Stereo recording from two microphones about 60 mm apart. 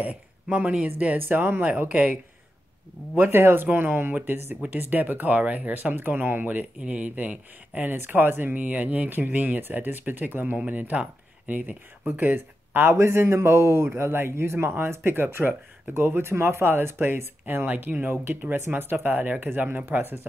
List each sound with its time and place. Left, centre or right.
0.0 s speech: right
3.2 s speech: right
7.9 s speech: right